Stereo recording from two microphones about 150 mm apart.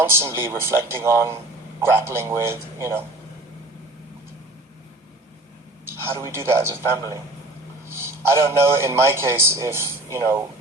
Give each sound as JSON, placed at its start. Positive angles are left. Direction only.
{"t": 0.0, "sound": "a man's voice", "side_deg": -15}
{"t": 5.8, "sound": "a man's voice", "side_deg": -15}
{"t": 7.9, "sound": "a sound", "side_deg": -15}
{"t": 8.6, "sound": "a man's voice", "side_deg": -15}